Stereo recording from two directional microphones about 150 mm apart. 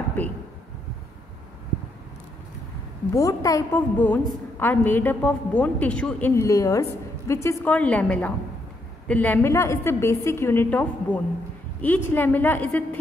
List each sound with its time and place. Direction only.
0.2 s a woman's voice: 15° left (ahead or behind)
3.2 s a woman's voice: 20° left (ahead or behind)
7.6 s a woman's voice: 10° left (ahead or behind)